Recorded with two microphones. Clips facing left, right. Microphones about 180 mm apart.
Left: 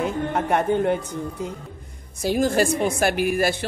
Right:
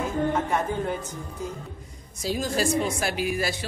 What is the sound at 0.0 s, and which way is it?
A woman's voice, 65° left (ahead or behind).